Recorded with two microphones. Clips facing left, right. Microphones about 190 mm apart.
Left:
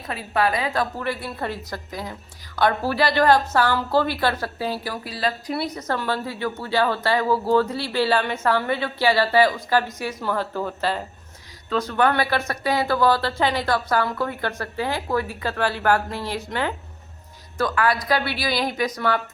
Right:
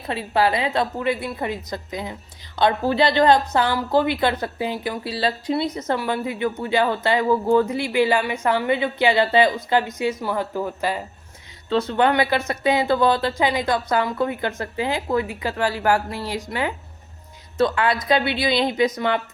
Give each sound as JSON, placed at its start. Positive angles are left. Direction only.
{"t": 0.1, "sound": "speech", "side_deg": -25}
{"t": 11.7, "sound": "a woman's voice", "side_deg": -25}
{"t": 17.6, "sound": "speech", "side_deg": -25}